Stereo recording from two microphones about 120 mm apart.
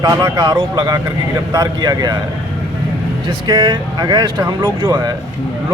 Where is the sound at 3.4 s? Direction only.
35° right (ahead or behind).